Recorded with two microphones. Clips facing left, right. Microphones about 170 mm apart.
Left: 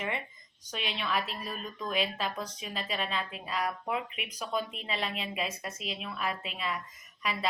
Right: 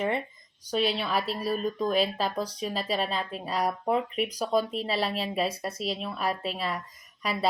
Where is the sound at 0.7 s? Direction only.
35° right (ahead or behind).